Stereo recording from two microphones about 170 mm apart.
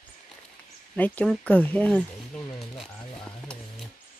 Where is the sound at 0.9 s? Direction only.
10° left (ahead or behind).